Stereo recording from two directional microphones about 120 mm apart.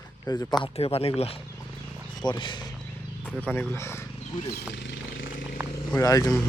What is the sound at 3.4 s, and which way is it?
Speech, 15° left (ahead or behind).